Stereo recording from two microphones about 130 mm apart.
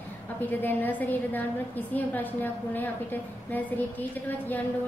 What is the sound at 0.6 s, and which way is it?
A woman's voice, 15° left (ahead or behind).